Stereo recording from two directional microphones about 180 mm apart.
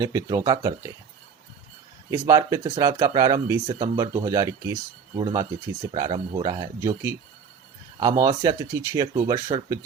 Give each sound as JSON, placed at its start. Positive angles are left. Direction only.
{"t": 0.0, "sound": "speech", "side_deg": -20}
{"t": 2.0, "sound": "speech", "side_deg": -20}